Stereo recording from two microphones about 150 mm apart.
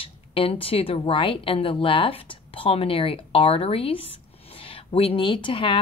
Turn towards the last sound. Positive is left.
turn(degrees=35)  # may be behind; listen again after turning